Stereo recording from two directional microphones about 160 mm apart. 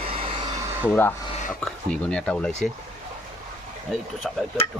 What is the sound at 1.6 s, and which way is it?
Speech, 5° left (ahead or behind).